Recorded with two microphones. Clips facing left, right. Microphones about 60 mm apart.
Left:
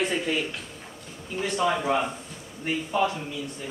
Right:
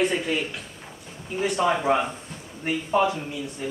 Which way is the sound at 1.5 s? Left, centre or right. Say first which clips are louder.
Right 2 dB; right.